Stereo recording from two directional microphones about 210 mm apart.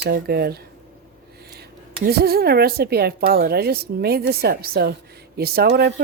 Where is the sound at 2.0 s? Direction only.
50° right (ahead or behind).